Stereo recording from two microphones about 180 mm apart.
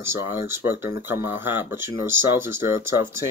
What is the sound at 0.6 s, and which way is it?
Speech, 10° right (ahead or behind).